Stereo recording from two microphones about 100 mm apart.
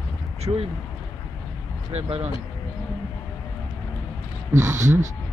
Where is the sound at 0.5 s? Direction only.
35° right (ahead or behind).